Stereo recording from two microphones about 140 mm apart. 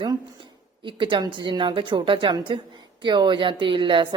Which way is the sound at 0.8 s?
35° right (ahead or behind).